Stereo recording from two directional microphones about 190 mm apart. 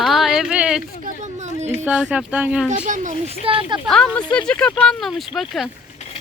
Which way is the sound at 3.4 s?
25° right (ahead or behind).